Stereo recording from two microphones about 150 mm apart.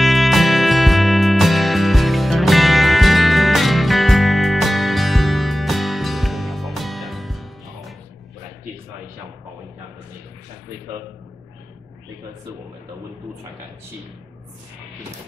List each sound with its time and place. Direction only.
0.0 s music: centre (ahead or behind)